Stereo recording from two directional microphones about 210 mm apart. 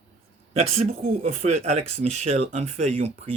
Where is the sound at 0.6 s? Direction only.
30° right (ahead or behind).